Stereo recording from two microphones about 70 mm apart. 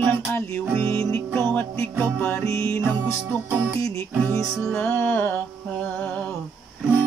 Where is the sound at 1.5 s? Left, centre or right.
Left.